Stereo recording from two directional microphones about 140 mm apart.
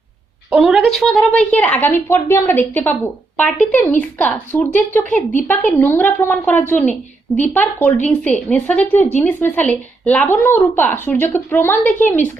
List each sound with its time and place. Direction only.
0.5 s a woman's voice: 10° right (ahead or behind)
0.9 s a woman's voice: 5° left (ahead or behind)